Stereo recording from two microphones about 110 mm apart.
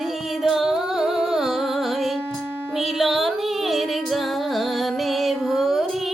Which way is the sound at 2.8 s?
Centre (ahead or behind).